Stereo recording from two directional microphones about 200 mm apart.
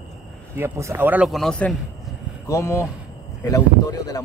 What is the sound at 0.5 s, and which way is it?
Speech, 15° right (ahead or behind).